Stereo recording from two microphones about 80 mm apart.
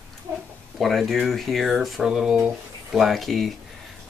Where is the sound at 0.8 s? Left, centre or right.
Centre.